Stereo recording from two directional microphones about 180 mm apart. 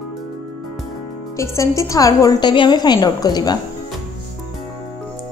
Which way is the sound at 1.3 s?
15° left (ahead or behind).